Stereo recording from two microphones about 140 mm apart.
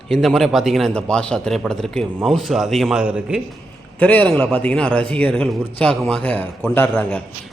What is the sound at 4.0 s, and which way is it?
A man's voice, 10° left (ahead or behind).